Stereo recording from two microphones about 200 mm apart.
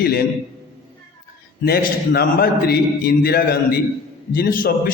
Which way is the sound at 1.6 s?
50° left (ahead or behind).